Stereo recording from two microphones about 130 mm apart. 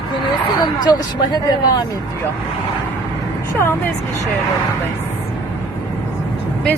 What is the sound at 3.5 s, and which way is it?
Speech, 20° left (ahead or behind).